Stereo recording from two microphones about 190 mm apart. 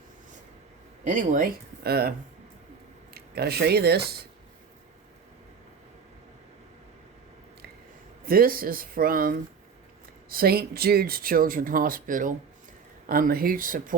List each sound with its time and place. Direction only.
1.0 s speech: 40° right (ahead or behind)
3.2 s speech: 55° right (ahead or behind)
8.2 s speech: 50° right (ahead or behind)